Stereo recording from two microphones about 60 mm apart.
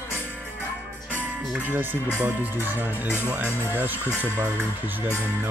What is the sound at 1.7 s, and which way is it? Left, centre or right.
Speech, right.